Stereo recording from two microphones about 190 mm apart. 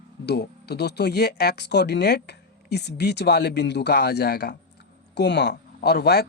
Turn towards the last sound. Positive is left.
turn(degrees=55)  # may be behind; listen again after turning